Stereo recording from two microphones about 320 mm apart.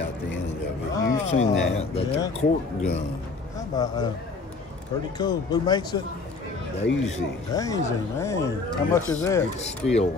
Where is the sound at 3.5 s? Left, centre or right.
Centre.